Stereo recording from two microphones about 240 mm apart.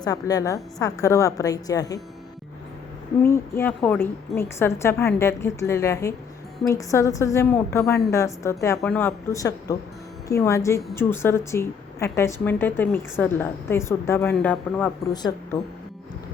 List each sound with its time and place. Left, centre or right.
0.0 s a woman's voice: centre
3.2 s a woman's voice: centre
15.1 s a woman's voice: centre